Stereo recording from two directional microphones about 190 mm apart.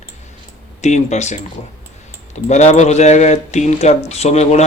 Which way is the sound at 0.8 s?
35° left (ahead or behind).